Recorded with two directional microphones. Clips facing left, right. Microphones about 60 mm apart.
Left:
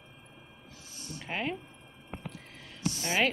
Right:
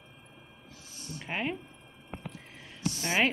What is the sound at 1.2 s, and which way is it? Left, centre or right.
Speech, centre.